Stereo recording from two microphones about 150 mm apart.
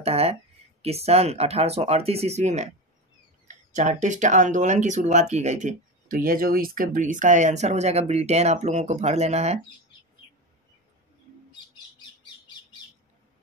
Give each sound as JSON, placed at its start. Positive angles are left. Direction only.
{"t": 0.0, "sound": "speech", "side_deg": -45}